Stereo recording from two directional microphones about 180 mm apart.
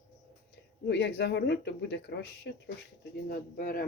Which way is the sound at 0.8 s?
70° left (ahead or behind).